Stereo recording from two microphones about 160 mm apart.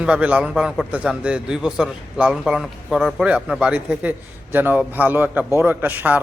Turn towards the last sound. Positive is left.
turn(degrees=-10)  # may be behind; listen again after turning